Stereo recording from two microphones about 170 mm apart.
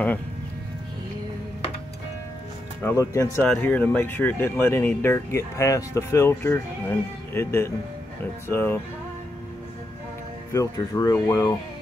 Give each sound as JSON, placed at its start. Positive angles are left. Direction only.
{"t": 2.8, "sound": "speech", "side_deg": 15}
{"t": 10.5, "sound": "speech", "side_deg": 20}